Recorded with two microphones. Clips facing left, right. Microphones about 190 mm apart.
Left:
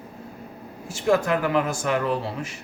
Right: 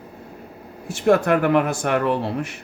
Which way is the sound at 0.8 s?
60° right (ahead or behind).